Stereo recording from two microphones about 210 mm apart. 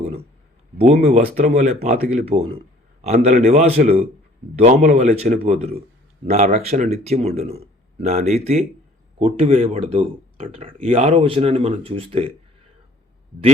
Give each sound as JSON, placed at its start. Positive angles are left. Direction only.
{"t": 1.0, "sound": "speech", "side_deg": -30}